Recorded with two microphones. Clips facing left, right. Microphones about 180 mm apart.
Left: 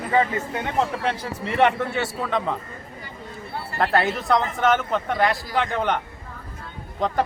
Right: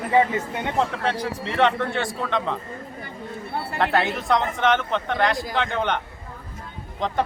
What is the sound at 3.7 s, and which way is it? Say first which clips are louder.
Speech: left 1 dB; centre (ahead or behind).